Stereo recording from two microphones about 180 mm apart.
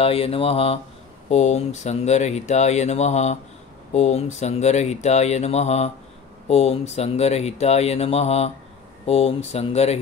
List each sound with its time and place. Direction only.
0.0 s speech: 30° left (ahead or behind)